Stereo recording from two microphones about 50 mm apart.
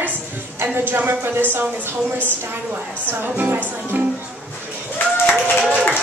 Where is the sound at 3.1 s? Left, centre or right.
Right.